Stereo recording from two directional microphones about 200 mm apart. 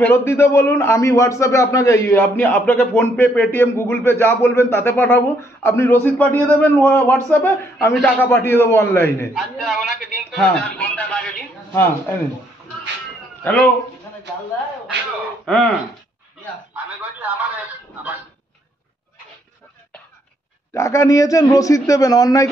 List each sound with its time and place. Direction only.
0.1 s a man's voice: 15° left (ahead or behind)
8.2 s a man's voice: 10° left (ahead or behind)
9.3 s a man's voice: centre (ahead or behind)
13.4 s speech: 10° left (ahead or behind)
15.4 s a man's voice: 5° left (ahead or behind)
16.7 s a man's voice: 10° right (ahead or behind)
20.7 s a man's voice: 15° left (ahead or behind)